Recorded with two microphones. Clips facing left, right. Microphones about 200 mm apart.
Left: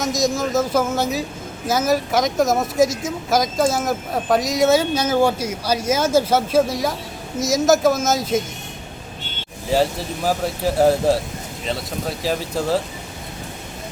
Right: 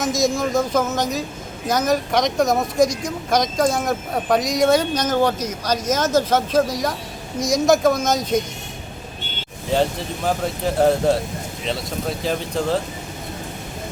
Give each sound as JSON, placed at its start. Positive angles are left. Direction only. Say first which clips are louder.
{"t": 0.0, "sound": "speech", "louder": "right 1 dB", "side_deg": 0}
{"t": 9.7, "sound": "speech", "louder": "left 1 dB", "side_deg": 0}